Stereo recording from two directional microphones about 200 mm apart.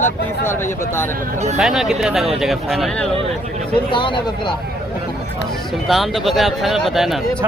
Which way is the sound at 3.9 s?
25° left (ahead or behind).